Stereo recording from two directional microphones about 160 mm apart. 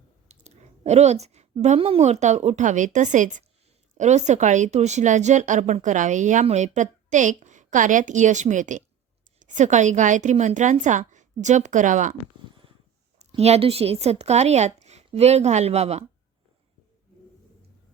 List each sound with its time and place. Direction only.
0.3 s a woman's voice: 45° right (ahead or behind)
13.1 s speech: 40° right (ahead or behind)